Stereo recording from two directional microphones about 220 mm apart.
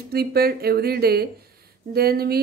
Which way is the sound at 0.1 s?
45° right (ahead or behind).